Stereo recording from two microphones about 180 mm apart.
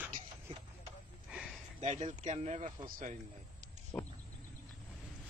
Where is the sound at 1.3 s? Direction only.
5° right (ahead or behind).